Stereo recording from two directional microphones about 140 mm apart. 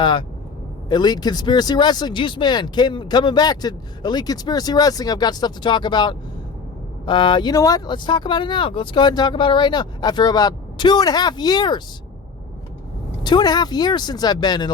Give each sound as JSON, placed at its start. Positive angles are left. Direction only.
{"t": 0.0, "sound": "speech", "side_deg": 35}
{"t": 13.2, "sound": "speech", "side_deg": 30}